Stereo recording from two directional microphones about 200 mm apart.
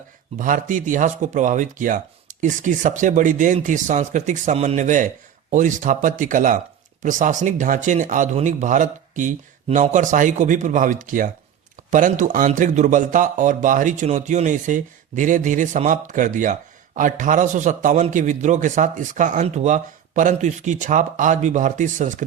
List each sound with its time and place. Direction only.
0.3 s speech: 40° right (ahead or behind)